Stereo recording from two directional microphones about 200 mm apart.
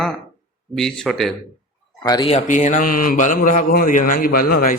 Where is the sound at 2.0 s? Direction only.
20° left (ahead or behind).